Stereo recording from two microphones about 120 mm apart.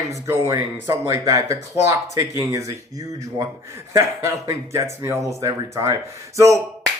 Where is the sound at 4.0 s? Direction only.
25° right (ahead or behind).